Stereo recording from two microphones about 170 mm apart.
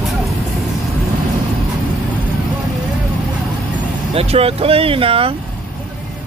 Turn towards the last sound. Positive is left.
turn(degrees=-30)  # may be behind; listen again after turning